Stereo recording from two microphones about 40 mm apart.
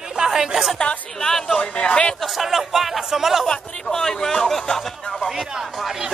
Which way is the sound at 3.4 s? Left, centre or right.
Centre.